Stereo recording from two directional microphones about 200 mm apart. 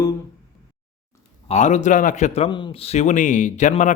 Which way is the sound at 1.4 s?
35° left (ahead or behind).